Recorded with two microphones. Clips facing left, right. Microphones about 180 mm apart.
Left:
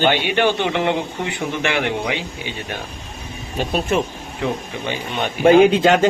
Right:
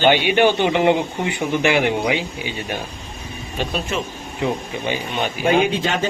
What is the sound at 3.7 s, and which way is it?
Speech, 55° left (ahead or behind).